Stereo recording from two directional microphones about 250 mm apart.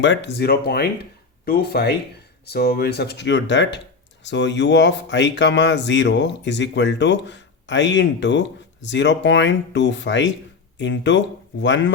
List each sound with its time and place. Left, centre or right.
0.0 s speech: left